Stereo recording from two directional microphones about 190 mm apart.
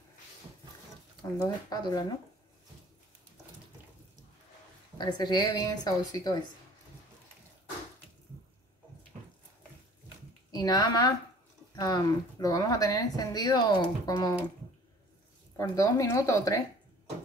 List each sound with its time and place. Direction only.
1.4 s speech: 20° left (ahead or behind)
4.9 s speech: 20° left (ahead or behind)
10.5 s speech: 20° left (ahead or behind)
15.5 s a woman's voice: 15° left (ahead or behind)